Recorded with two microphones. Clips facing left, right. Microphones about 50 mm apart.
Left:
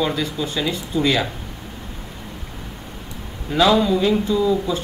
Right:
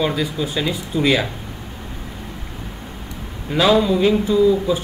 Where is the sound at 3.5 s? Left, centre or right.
Centre.